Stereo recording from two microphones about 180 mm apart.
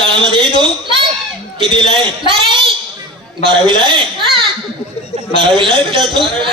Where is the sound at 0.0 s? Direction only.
30° right (ahead or behind).